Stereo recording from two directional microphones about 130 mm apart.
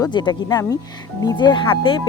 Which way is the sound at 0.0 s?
35° left (ahead or behind).